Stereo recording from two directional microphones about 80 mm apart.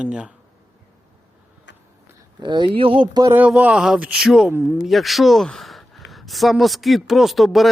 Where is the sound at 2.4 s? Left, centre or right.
Right.